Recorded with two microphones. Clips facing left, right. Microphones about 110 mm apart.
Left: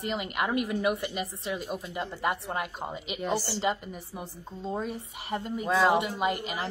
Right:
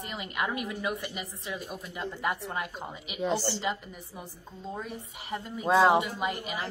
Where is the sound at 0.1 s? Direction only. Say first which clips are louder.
Left 3 dB; 20° left (ahead or behind).